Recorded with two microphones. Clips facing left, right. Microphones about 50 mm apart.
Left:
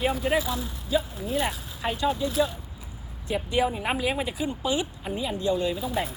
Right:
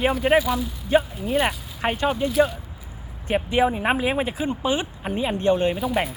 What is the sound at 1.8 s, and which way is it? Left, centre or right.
Speech, right.